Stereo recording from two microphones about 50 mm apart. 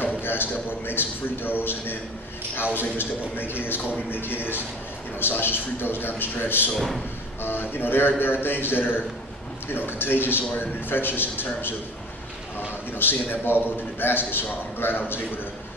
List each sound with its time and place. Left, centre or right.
0.0 s a man's voice: left
12.5 s a man's voice: left